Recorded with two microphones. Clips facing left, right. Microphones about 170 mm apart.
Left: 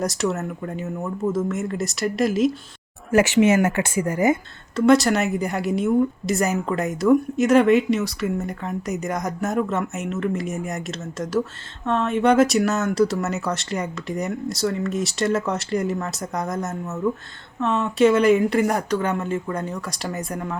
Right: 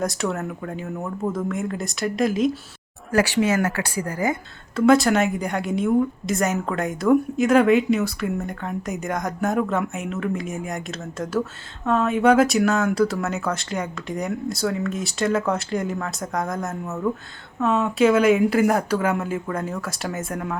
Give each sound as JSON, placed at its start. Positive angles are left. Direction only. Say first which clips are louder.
{"t": 0.0, "sound": "a woman's voice", "louder": "left 1 dB", "side_deg": 0}
{"t": 3.1, "sound": "speech", "louder": "left 3 dB", "side_deg": 20}
{"t": 4.7, "sound": "a woman's voice", "louder": "even", "side_deg": 0}